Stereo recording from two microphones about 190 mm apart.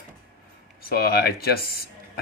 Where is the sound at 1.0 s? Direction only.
55° left (ahead or behind).